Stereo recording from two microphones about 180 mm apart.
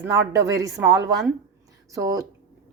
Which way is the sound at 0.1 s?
15° right (ahead or behind).